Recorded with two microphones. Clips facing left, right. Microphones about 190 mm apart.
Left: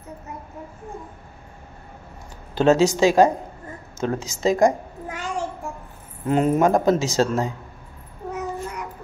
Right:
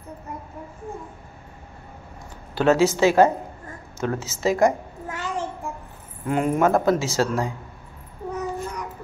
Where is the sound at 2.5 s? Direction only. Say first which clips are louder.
Left 1 dB; 20° left (ahead or behind).